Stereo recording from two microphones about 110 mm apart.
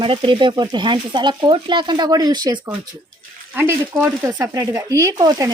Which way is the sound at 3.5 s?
20° right (ahead or behind).